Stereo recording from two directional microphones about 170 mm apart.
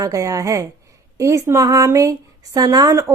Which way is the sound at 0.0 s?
20° right (ahead or behind).